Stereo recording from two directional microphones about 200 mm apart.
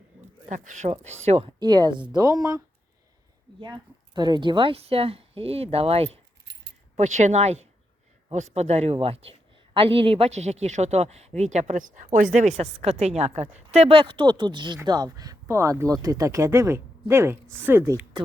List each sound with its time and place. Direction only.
0.5 s a woman's voice: 35° right (ahead or behind)
1.5 s a woman's voice: 20° right (ahead or behind)
3.6 s a woman's voice: 20° right (ahead or behind)